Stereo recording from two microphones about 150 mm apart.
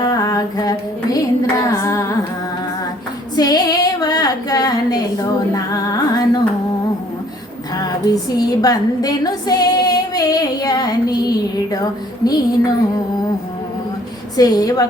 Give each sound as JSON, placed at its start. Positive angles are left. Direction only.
{"t": 0.0, "sound": "female singing", "side_deg": 25}
{"t": 3.3, "sound": "female singing", "side_deg": 25}
{"t": 7.8, "sound": "a woman's voice", "side_deg": 25}
{"t": 12.2, "sound": "female singing", "side_deg": 30}
{"t": 14.3, "sound": "female singing", "side_deg": 25}